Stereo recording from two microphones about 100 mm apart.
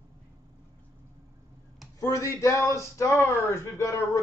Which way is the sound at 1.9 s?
35° left (ahead or behind).